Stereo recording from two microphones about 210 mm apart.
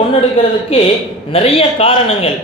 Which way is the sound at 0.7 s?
25° left (ahead or behind).